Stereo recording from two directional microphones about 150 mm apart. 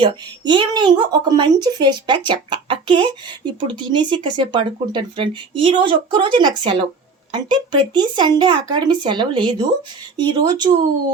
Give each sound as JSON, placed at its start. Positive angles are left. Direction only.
{"t": 0.0, "sound": "speech", "side_deg": -30}